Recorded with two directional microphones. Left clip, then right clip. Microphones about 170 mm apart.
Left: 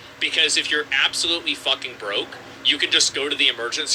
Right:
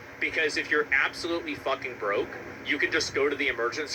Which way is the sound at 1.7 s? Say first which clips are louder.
Left 4 dB; 40° left (ahead or behind).